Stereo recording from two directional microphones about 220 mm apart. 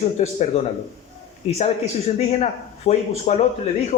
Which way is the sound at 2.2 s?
30° left (ahead or behind).